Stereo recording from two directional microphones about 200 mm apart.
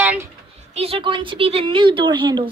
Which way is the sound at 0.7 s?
30° right (ahead or behind).